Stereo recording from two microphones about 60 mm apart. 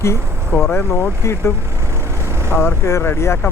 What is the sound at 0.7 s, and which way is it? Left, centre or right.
Speech, left.